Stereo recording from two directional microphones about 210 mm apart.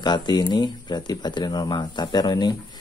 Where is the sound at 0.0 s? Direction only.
20° left (ahead or behind).